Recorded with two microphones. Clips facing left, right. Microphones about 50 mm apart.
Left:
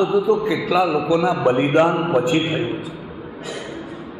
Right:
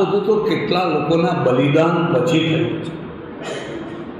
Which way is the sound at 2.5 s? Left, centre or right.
Right.